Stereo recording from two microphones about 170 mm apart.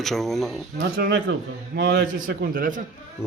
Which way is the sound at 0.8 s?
80° right.